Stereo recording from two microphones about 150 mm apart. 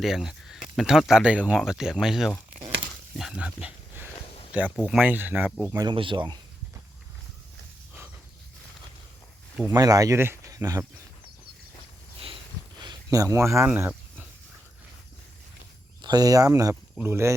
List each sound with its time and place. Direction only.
0.0 s speech: 5° right (ahead or behind)
5.7 s speech: 30° right (ahead or behind)
9.7 s speech: 25° right (ahead or behind)
12.8 s speech: 25° right (ahead or behind)
16.0 s speech: 30° right (ahead or behind)